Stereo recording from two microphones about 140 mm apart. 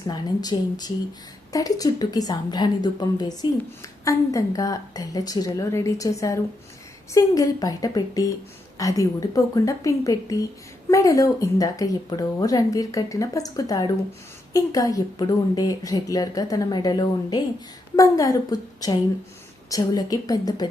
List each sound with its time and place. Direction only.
0.0 s speech: 30° left (ahead or behind)